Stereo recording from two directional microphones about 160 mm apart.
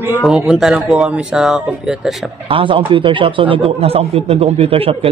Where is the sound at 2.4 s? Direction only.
30° right (ahead or behind).